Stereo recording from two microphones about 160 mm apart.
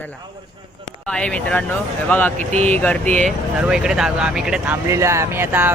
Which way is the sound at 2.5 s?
45° right (ahead or behind).